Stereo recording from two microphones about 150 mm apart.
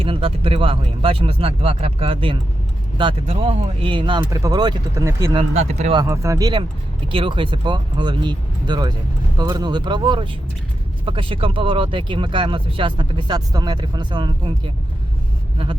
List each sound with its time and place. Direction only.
0.0 s speech: 35° right (ahead or behind); by 5.3 s 20° right (ahead or behind)
5.3 s speech: 40° right (ahead or behind)
6.1 s speech: 20° right (ahead or behind)